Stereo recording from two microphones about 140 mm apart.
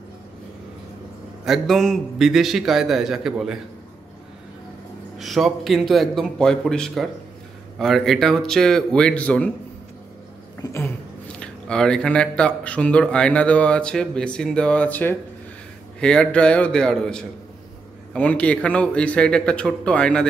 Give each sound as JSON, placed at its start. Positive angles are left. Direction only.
{"t": 1.4, "sound": "a man's voice", "side_deg": 0}
{"t": 5.2, "sound": "a man's voice", "side_deg": 0}
{"t": 10.6, "sound": "a sound", "side_deg": 20}
{"t": 11.3, "sound": "speech", "side_deg": 5}